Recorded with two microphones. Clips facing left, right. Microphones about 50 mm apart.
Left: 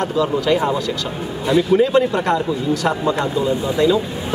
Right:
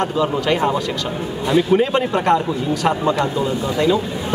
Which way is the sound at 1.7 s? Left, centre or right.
Right.